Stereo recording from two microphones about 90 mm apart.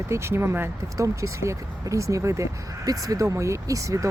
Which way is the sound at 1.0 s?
35° right (ahead or behind).